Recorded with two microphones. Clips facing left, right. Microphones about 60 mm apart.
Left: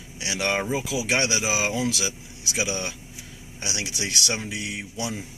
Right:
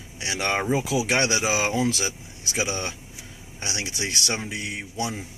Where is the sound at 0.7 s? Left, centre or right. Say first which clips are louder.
Right 2 dB; right.